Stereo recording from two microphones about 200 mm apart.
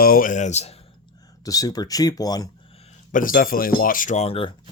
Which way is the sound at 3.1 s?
40° left (ahead or behind).